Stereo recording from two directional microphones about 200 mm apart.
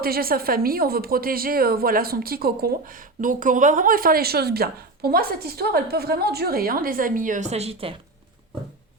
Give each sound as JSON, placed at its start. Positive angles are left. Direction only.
{"t": 0.0, "sound": "a woman's voice", "side_deg": -50}